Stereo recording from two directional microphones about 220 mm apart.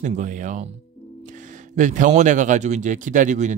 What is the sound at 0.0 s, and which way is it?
Speech, 35° right (ahead or behind).